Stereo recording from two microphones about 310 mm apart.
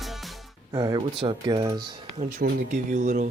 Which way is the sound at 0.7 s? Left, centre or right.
Centre.